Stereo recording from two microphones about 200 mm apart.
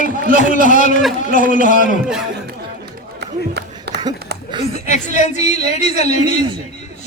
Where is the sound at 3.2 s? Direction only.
55° right (ahead or behind).